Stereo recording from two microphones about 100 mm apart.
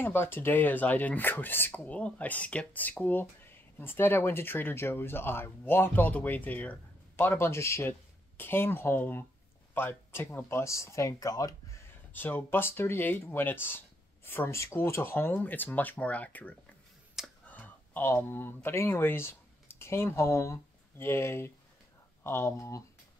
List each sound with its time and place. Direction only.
0.0 s speech: 20° left (ahead or behind)
12.1 s speech: 20° left (ahead or behind)